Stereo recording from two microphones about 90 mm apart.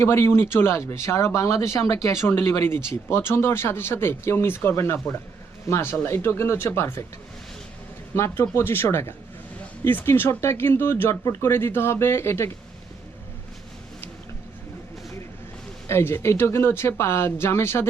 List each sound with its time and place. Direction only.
0.0 s speech: 30° left (ahead or behind)
8.1 s speech: 30° left (ahead or behind)
15.9 s speech: 30° left (ahead or behind)